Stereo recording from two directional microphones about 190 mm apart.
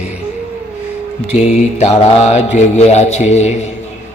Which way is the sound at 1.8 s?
35° left (ahead or behind).